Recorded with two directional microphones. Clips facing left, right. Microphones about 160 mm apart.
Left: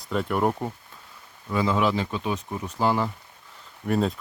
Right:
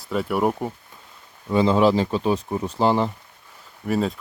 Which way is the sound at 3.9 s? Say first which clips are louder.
Right 1 dB; centre (ahead or behind).